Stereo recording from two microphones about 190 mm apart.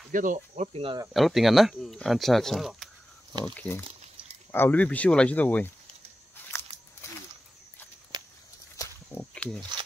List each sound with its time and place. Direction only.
0.1 s speech: 45° right (ahead or behind)
0.7 s speech: 30° right (ahead or behind)
1.1 s speech: centre (ahead or behind)
3.5 s speech: 10° left (ahead or behind)
6.7 s biting: 35° right (ahead or behind)
8.1 s walk: 20° right (ahead or behind)
8.7 s walk: 15° left (ahead or behind)
9.3 s a sound: 5° left (ahead or behind)